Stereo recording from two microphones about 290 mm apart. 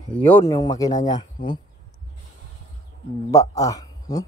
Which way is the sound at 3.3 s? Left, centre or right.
Centre.